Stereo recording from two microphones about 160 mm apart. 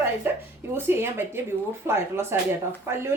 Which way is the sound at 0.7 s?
15° right (ahead or behind).